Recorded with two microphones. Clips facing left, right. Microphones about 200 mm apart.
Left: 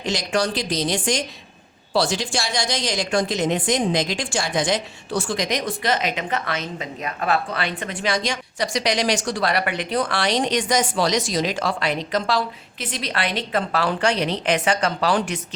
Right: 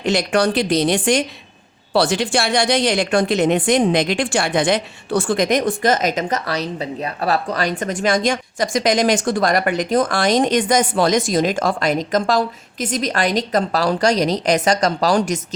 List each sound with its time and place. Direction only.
0.0 s a woman's voice: 60° right (ahead or behind); by 15.4 s 40° right (ahead or behind)